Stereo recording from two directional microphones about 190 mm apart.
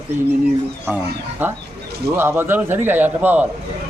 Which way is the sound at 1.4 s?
10° right (ahead or behind).